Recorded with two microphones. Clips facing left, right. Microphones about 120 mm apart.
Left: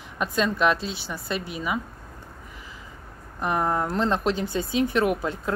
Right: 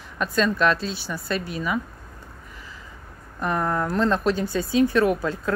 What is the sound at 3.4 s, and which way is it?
Speech, 20° left (ahead or behind).